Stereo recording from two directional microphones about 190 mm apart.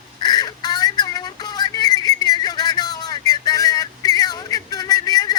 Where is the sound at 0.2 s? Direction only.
20° left (ahead or behind).